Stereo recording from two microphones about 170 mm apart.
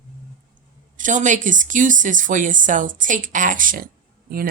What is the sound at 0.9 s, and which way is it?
Speech, 50° right (ahead or behind).